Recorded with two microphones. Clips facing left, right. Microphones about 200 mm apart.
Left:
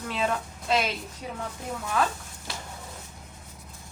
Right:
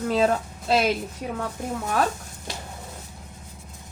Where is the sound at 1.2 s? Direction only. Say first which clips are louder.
Right 5 dB; 60° right (ahead or behind).